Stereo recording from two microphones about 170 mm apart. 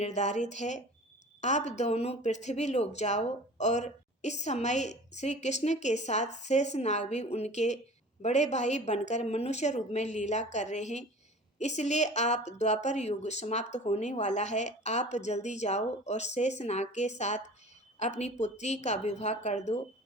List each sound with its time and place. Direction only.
0.0 s speech: 45° left (ahead or behind)